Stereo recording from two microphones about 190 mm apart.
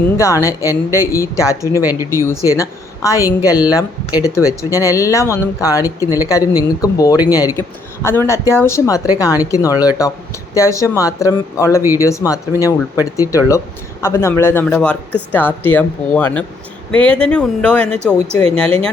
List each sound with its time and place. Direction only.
0.4 s a woman's voice: 15° left (ahead or behind)
1.6 s speech: 15° right (ahead or behind)
2.0 s a woman's voice: 15° left (ahead or behind)
18.0 s speech: 15° right (ahead or behind)
18.3 s speech: 5° left (ahead or behind)